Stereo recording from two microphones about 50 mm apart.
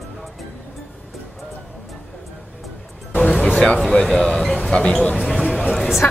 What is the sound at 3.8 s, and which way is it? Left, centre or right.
Speech, centre.